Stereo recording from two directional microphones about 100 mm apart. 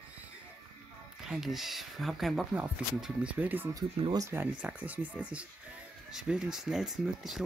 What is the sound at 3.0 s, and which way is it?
Speech, 10° right (ahead or behind).